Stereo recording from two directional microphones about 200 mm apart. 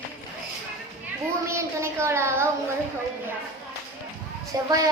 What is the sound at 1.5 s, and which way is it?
A child's voice, 15° right (ahead or behind).